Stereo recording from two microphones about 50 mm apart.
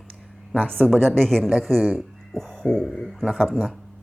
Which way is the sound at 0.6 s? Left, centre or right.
Left.